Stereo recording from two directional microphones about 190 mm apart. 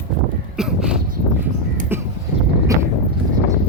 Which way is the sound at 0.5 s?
5° right (ahead or behind).